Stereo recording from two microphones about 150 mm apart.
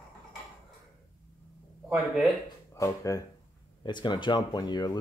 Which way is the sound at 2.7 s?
20° left (ahead or behind).